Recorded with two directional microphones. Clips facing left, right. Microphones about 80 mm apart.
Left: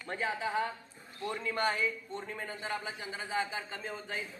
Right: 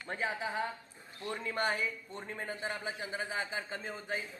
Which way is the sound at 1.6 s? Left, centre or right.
Centre.